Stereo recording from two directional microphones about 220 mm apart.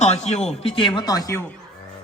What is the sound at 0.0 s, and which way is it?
Speech, 30° left (ahead or behind).